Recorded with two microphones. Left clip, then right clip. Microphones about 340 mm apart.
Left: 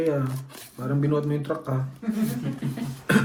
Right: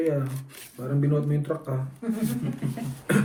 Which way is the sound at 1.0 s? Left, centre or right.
Left.